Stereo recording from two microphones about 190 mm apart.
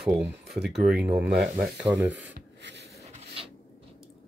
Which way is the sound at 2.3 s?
65° right (ahead or behind).